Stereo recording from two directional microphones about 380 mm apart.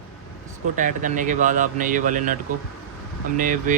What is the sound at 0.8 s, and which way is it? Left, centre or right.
Speech, centre.